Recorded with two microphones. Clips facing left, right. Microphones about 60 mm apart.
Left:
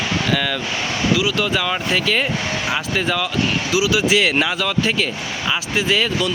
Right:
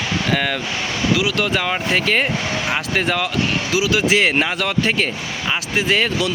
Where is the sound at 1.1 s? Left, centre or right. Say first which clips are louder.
Even; right.